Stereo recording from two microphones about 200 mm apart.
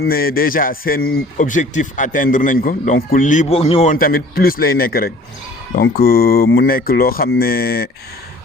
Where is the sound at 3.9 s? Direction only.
45° left (ahead or behind).